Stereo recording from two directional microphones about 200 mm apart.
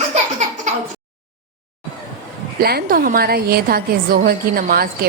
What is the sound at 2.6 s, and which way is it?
A woman's voice, 50° right (ahead or behind).